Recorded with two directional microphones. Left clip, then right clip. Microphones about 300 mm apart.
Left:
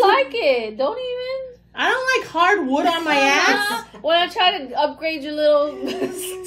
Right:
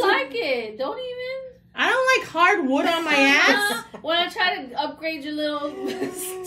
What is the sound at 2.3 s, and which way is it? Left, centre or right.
Speech, centre.